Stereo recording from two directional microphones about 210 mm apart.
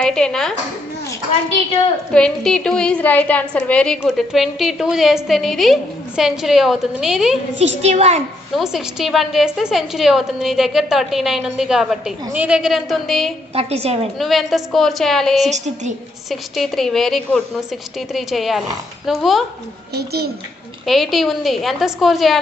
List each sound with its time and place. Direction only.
0.0 s speech: 5° left (ahead or behind)
2.1 s a woman's voice: 5° left (ahead or behind)
7.6 s a woman's voice: 30° right (ahead or behind)
8.5 s a woman's voice: centre (ahead or behind)
13.6 s a woman's voice: 30° right (ahead or behind)
14.2 s a woman's voice: centre (ahead or behind)
15.4 s a woman's voice: 35° right (ahead or behind)
16.3 s a woman's voice: centre (ahead or behind)
19.9 s a child's voice: 50° right (ahead or behind)
20.8 s a woman's voice: centre (ahead or behind)